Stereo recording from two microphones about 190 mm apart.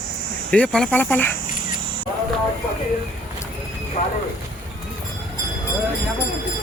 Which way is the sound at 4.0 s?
40° left (ahead or behind).